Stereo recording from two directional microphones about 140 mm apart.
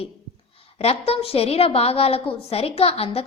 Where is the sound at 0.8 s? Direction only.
45° left (ahead or behind).